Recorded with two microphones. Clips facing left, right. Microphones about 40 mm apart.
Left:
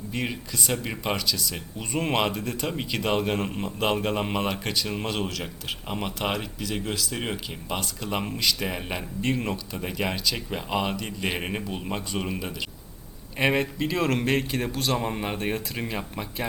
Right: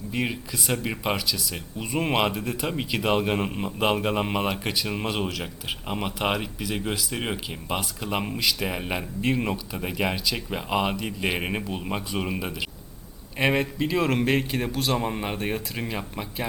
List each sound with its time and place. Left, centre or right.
0.1 s speech: centre
13.4 s a man's voice: centre